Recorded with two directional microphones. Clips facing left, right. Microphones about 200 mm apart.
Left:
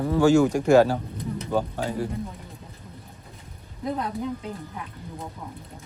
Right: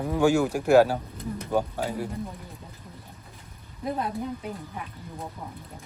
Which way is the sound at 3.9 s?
10° right (ahead or behind).